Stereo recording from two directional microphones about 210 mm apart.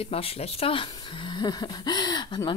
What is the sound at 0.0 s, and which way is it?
Speech, 30° left (ahead or behind).